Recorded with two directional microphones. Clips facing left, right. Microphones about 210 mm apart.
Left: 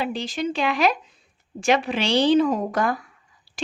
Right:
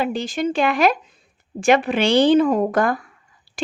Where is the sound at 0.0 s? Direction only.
45° right (ahead or behind).